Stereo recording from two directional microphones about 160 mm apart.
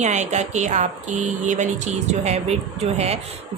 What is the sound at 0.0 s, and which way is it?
A woman's voice, 45° right (ahead or behind).